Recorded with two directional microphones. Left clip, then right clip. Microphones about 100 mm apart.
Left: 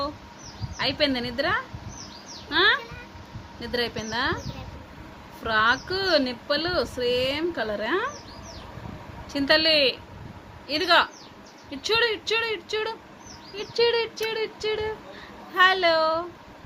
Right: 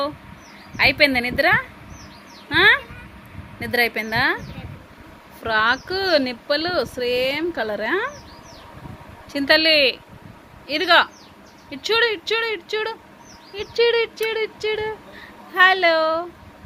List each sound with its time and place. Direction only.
0.8 s speech: 45° right (ahead or behind)
5.4 s speech: 45° right (ahead or behind)
9.3 s speech: 40° right (ahead or behind)
15.5 s speech: 45° right (ahead or behind)